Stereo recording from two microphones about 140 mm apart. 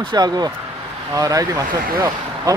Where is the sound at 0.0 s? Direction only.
30° right (ahead or behind).